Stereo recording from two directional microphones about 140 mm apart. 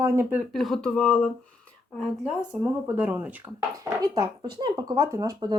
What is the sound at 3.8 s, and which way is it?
Speech, 25° right (ahead or behind).